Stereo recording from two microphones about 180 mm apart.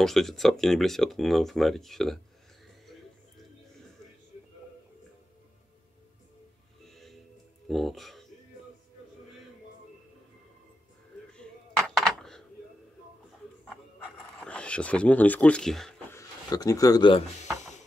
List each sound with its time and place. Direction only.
0.0 s speech: centre (ahead or behind)
6.9 s music: centre (ahead or behind)
7.6 s speech: centre (ahead or behind)
11.3 s a sound: 5° left (ahead or behind)
14.4 s speech: 5° left (ahead or behind)
16.1 s a sound: 20° left (ahead or behind)